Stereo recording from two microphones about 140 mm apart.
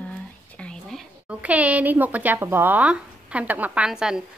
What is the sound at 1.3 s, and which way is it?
Speech, 10° right (ahead or behind).